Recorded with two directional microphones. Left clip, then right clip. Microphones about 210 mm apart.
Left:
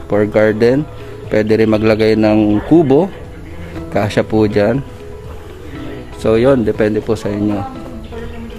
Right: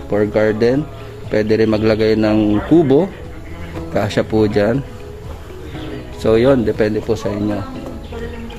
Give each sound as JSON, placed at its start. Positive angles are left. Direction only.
{"t": 0.1, "sound": "a man's voice", "side_deg": 20}
{"t": 6.2, "sound": "a man's voice", "side_deg": 15}